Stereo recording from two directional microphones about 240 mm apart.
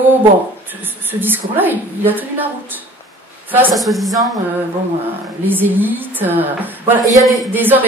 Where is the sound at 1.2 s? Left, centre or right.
Centre.